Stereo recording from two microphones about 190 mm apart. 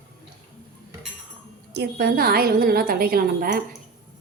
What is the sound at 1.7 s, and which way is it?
A woman's voice, 60° right (ahead or behind).